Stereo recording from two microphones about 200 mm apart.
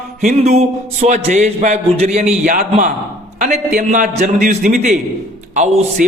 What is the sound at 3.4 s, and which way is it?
A man's voice, 40° right (ahead or behind).